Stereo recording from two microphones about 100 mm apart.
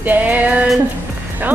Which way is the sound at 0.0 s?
15° right (ahead or behind).